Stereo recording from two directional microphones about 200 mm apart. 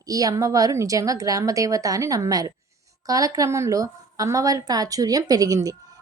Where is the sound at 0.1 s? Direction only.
15° right (ahead or behind).